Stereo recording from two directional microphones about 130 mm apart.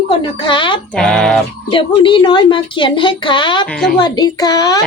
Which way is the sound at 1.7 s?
40° left (ahead or behind).